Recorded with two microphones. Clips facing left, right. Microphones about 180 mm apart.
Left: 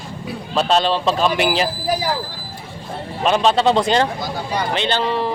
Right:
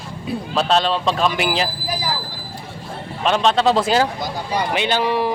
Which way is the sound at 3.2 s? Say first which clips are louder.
Left 1 dB; centre (ahead or behind).